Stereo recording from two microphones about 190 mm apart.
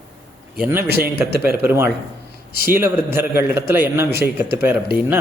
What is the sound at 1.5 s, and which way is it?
A man's voice, 10° right (ahead or behind).